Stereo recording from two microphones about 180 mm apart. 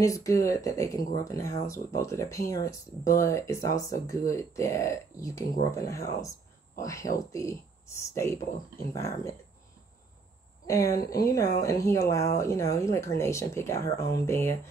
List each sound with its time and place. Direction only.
0.0 s speech: 20° left (ahead or behind)
10.7 s speech: 20° left (ahead or behind)